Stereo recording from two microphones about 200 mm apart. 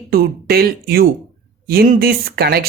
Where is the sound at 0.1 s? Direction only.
50° right (ahead or behind).